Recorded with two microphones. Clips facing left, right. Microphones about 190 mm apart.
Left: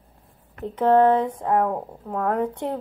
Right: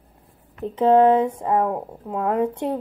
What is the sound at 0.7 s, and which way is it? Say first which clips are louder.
Speech: right 2 dB; 10° right (ahead or behind).